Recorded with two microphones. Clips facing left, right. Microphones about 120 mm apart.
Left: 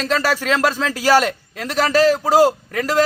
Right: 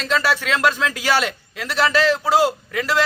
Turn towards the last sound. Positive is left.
turn(degrees=40)  # may be behind; listen again after turning